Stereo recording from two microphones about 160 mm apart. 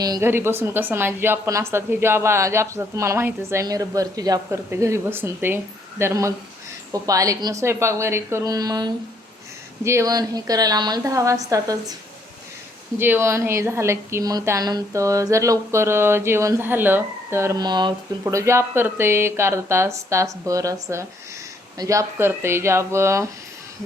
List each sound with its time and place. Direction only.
0.0 s a woman's voice: 20° right (ahead or behind)
13.0 s a woman's voice: 15° right (ahead or behind)